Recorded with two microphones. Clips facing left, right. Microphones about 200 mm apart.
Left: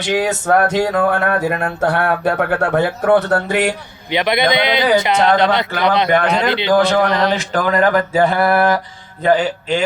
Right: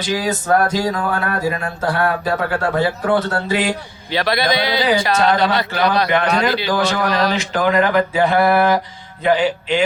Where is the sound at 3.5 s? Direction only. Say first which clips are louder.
Right 1 dB; 65° left (ahead or behind).